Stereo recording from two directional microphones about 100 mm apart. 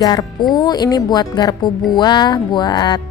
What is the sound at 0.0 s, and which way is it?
A woman's voice, 40° left (ahead or behind).